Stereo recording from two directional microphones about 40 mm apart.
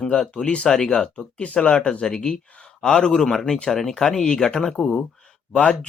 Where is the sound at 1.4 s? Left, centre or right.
Left; by 4.9 s centre.